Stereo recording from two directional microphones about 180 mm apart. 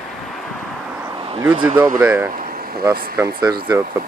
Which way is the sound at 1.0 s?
25° right (ahead or behind).